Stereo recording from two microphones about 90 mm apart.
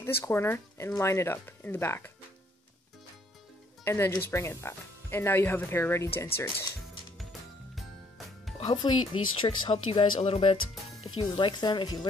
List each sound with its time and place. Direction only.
0.0 s speech: 25° left (ahead or behind)
3.8 s speech: 25° left (ahead or behind)
8.6 s a woman's voice: 55° left (ahead or behind); by 10.6 s 85° left
11.1 s speech: 65° left (ahead or behind)